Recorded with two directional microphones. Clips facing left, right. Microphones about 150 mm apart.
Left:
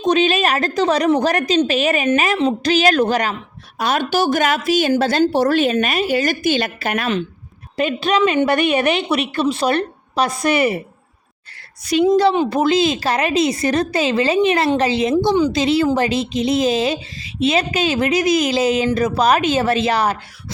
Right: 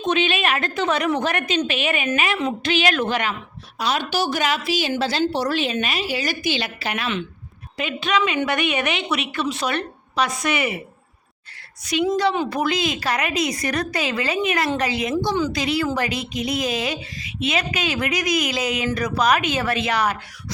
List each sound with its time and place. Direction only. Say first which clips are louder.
0.0 s a woman's voice: left 5 dB; 40° left (ahead or behind)
3.8 s a woman's voice: left 5 dB; 50° left (ahead or behind); by 10.8 s 35° left (ahead or behind)
11.9 s a woman's voice: left 6 dB; 30° left (ahead or behind)